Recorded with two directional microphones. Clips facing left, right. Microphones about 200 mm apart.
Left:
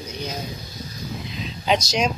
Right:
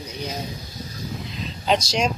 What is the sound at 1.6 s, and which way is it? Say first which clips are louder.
Speech: even; 5° left (ahead or behind).